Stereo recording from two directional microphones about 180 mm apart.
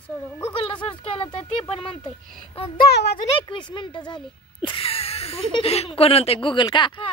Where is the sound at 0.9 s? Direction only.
30° left (ahead or behind).